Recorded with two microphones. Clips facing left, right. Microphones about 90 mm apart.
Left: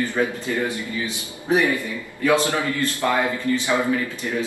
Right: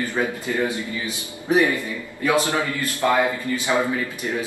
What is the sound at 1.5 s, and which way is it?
Speech, 20° left (ahead or behind).